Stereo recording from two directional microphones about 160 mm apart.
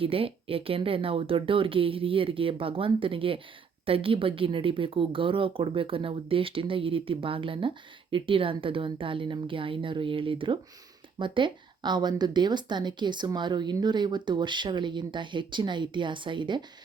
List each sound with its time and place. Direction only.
0.0 s a woman's voice: 35° right (ahead or behind)